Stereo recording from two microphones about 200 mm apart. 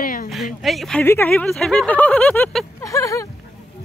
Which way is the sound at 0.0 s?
45° left (ahead or behind).